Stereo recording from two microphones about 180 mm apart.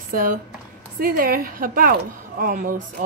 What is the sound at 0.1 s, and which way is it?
Speech, 50° right (ahead or behind).